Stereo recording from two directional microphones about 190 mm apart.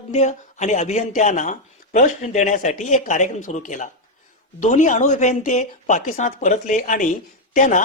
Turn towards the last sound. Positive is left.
turn(degrees=40)  # may be behind; listen again after turning